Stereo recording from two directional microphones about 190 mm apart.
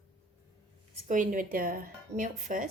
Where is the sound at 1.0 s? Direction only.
45° right (ahead or behind).